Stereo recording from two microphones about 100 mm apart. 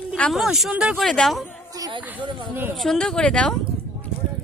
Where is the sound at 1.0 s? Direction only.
5° left (ahead or behind).